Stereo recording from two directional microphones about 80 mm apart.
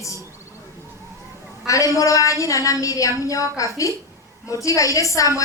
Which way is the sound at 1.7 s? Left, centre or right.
Left.